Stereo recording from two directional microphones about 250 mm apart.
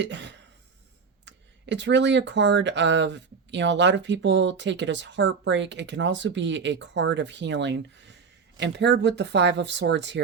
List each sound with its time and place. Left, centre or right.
0.0 s speech: right